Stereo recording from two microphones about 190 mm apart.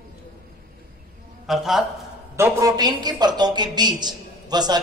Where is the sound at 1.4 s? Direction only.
Centre (ahead or behind).